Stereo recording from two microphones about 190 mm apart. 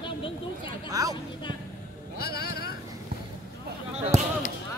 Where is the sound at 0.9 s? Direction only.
20° right (ahead or behind).